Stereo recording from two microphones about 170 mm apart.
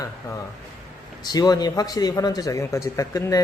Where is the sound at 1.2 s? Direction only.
25° left (ahead or behind).